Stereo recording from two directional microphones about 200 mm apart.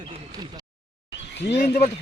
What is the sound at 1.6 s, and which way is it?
Speech, 40° left (ahead or behind).